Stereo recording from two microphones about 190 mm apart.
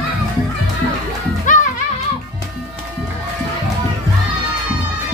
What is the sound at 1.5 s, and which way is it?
Music, 45° left (ahead or behind).